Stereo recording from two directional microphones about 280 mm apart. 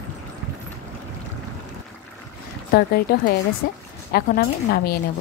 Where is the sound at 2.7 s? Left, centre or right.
Left.